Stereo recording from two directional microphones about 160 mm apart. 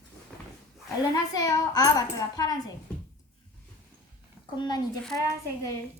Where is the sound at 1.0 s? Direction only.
25° left (ahead or behind).